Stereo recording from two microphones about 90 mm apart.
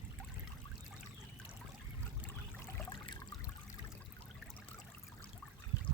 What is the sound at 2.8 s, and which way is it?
Trickle, 65° left (ahead or behind).